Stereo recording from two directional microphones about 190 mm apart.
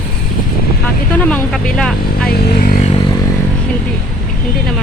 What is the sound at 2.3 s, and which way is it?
Speech, 55° left (ahead or behind).